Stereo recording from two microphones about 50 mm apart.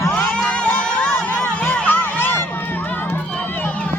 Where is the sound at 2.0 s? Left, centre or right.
Left.